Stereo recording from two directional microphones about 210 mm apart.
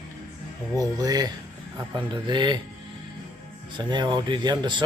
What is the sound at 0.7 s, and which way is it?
Speech, 20° right (ahead or behind).